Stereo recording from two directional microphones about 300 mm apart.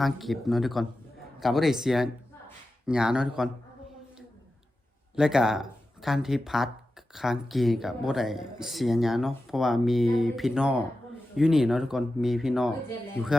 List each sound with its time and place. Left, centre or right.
0.0 s speech: centre
5.1 s speech: centre